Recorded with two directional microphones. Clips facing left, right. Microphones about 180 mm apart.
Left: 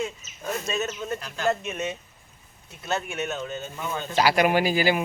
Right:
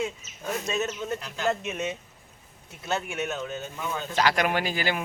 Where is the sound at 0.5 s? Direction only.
15° right (ahead or behind).